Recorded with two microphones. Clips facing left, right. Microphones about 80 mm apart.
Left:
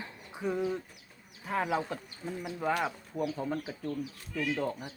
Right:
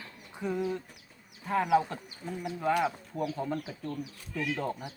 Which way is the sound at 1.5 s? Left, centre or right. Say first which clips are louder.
Right 5 dB; centre.